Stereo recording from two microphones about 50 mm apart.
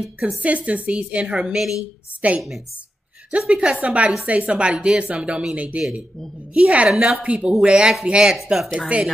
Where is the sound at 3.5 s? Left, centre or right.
Right.